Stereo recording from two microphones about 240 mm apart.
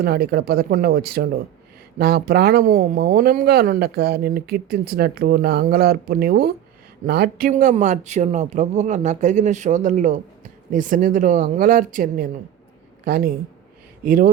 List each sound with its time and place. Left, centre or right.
0.0 s speech: right